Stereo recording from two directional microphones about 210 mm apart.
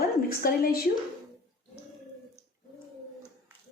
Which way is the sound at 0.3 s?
45° left (ahead or behind).